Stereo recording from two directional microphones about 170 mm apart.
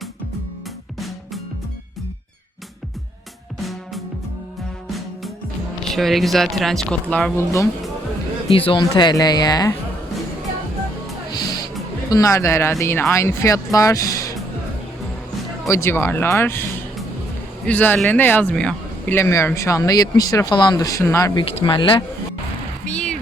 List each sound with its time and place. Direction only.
3.6 s music: centre (ahead or behind)
5.9 s speech: centre (ahead or behind)
8.4 s speech: 35° left (ahead or behind)
12.0 s speech: 20° left (ahead or behind)
15.6 s speech: 15° left (ahead or behind)
17.7 s speech: 10° left (ahead or behind)
21.4 s speech: 30° left (ahead or behind)
22.9 s music: 5° left (ahead or behind)